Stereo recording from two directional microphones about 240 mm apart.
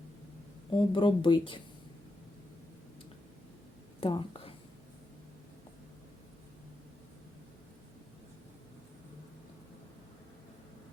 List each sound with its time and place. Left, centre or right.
0.7 s speech: centre
4.0 s a woman's voice: left